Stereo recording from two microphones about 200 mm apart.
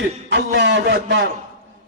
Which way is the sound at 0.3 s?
60° right (ahead or behind).